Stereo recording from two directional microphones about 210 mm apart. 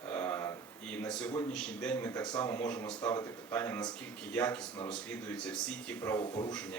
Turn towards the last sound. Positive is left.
turn(degrees=20)  # may be behind; listen again after turning